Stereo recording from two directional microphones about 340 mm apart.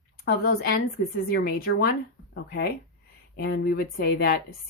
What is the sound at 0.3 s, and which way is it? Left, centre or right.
A woman's voice, left.